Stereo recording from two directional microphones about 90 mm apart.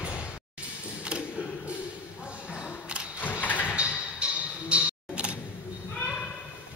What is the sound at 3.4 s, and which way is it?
Sliding door, 20° left (ahead or behind).